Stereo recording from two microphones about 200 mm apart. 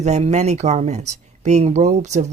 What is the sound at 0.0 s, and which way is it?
Speech, 35° right (ahead or behind).